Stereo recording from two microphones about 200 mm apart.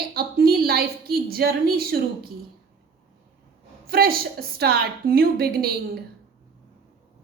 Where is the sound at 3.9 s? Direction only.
50° right (ahead or behind).